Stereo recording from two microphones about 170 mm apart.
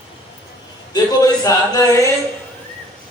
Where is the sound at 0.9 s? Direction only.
25° left (ahead or behind).